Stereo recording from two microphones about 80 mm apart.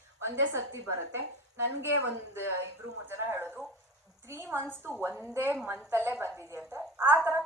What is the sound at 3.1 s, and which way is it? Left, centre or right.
A woman's voice, right.